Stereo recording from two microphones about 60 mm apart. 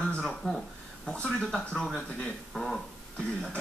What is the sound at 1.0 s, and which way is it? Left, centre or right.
Speech, centre.